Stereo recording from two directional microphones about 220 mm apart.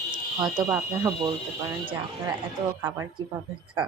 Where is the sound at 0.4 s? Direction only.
5° right (ahead or behind).